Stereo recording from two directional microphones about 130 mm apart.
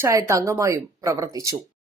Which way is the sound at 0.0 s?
20° right (ahead or behind).